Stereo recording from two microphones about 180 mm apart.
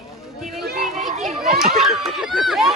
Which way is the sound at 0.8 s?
Centre (ahead or behind).